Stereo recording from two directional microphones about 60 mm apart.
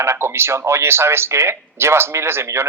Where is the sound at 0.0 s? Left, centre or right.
Right.